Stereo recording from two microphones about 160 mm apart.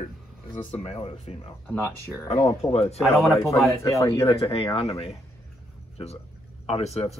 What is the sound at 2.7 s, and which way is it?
Speech, 40° left (ahead or behind).